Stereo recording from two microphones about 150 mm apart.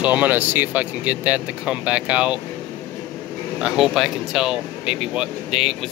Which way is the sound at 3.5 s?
5° right (ahead or behind).